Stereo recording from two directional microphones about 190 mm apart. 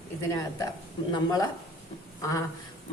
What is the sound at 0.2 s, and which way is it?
A woman's voice, 15° left (ahead or behind).